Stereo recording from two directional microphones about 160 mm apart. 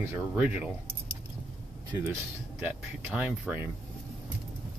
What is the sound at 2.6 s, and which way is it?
Speech, 10° right (ahead or behind).